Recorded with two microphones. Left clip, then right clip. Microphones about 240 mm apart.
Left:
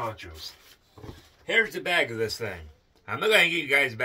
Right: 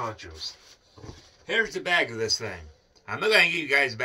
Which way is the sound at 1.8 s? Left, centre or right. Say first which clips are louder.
Right 1 dB; centre.